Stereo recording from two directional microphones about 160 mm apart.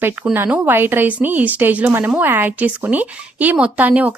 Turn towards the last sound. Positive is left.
turn(degrees=-10)  # may be behind; listen again after turning